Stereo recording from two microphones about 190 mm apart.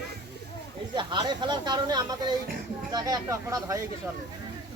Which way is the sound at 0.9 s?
25° right (ahead or behind).